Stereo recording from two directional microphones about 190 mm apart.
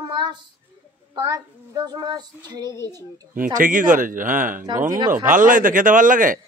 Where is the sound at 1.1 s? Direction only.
20° right (ahead or behind).